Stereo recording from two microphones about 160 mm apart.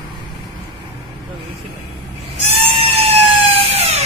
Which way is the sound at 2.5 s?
40° right (ahead or behind).